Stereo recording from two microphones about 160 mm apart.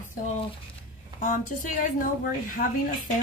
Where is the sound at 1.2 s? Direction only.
55° left (ahead or behind).